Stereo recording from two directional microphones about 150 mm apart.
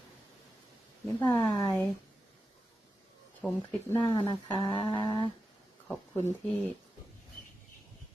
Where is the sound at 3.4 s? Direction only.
10° left (ahead or behind).